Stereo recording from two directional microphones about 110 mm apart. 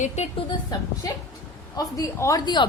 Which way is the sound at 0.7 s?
35° left (ahead or behind).